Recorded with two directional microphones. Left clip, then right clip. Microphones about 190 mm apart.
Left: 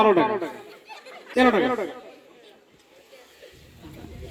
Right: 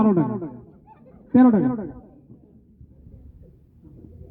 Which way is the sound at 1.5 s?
15° left (ahead or behind).